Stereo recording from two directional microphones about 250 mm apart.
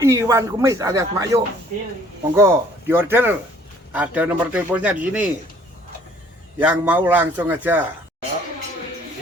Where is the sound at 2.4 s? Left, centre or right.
Centre.